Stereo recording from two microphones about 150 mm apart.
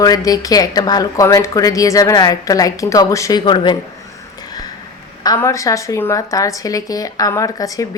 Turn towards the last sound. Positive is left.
turn(degrees=20)  # may be behind; listen again after turning